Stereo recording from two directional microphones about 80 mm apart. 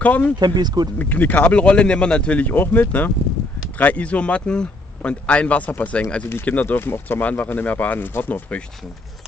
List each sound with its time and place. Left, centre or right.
0.0 s speech: centre
0.4 s speech: right
0.9 s speech: left